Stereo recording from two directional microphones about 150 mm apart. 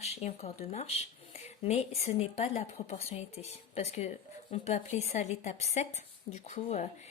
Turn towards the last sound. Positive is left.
turn(degrees=50)  # may be behind; listen again after turning